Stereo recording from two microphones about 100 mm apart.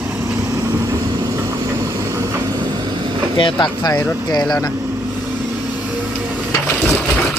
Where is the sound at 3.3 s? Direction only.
50° left (ahead or behind).